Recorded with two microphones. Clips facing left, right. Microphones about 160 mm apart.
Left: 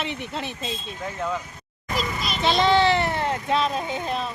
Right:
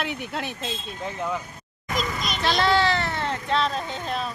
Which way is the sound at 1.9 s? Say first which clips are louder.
Even; 5° left (ahead or behind).